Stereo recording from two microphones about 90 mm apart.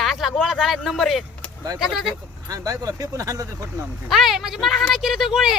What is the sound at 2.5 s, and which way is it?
Speech, 40° right (ahead or behind).